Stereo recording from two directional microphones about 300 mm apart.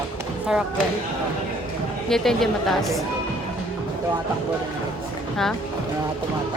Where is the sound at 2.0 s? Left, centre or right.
Centre.